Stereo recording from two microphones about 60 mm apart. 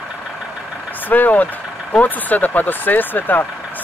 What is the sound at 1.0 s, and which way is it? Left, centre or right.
Speech, left.